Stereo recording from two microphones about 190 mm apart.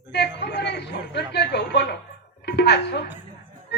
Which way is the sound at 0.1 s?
60° left (ahead or behind).